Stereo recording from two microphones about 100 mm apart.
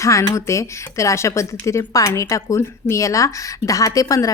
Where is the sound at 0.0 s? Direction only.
30° left (ahead or behind).